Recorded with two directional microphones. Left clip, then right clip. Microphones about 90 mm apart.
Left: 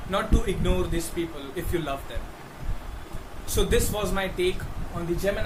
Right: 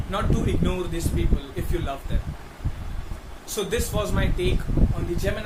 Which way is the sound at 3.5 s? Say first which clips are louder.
Left 2 dB; 20° left (ahead or behind).